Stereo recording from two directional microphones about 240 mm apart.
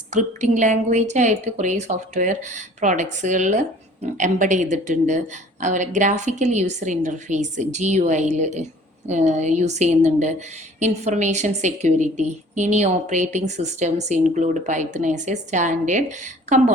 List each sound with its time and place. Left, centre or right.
0.1 s a woman's voice: right